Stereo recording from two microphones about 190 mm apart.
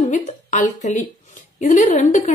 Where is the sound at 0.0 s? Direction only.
40° left (ahead or behind).